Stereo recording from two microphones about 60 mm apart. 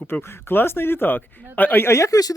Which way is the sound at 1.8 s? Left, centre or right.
Left.